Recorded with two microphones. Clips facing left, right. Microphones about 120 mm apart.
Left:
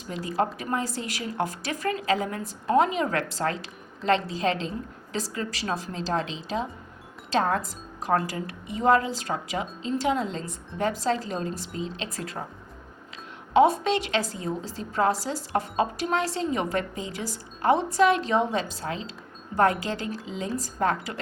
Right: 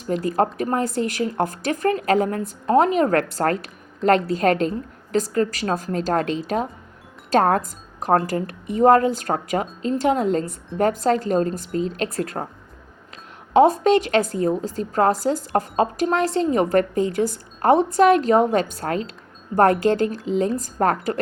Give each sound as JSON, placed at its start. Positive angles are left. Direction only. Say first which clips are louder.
{"t": 0.1, "sound": "a woman's voice", "louder": "right 7 dB", "side_deg": -45}
{"t": 13.5, "sound": "a woman's voice", "louder": "right 5 dB", "side_deg": -45}